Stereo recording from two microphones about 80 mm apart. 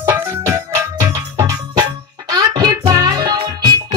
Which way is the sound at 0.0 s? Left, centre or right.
Right.